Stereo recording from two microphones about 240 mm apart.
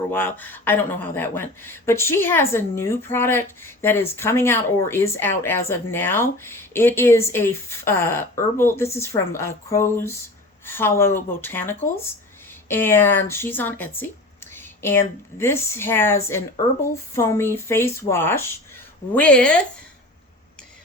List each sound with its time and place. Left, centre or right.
0.1 s speech: centre